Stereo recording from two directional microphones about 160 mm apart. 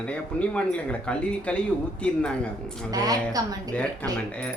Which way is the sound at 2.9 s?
20° right (ahead or behind).